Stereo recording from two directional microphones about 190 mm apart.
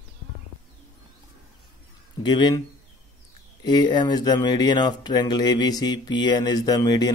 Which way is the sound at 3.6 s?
25° left (ahead or behind).